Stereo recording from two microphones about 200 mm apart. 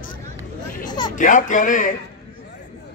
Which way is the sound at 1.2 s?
40° left (ahead or behind).